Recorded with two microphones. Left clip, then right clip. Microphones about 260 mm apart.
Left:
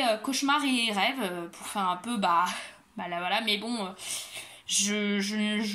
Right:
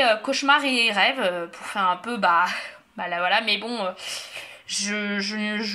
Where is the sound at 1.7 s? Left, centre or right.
Left.